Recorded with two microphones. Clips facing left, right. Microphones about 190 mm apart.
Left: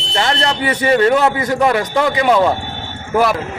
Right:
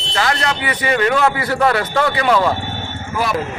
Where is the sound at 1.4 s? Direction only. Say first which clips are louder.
Left 2 dB; 15° left (ahead or behind).